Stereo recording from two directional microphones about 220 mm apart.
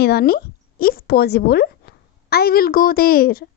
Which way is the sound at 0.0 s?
45° left (ahead or behind).